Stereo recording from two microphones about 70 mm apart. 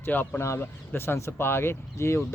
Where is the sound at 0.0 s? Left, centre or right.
Left.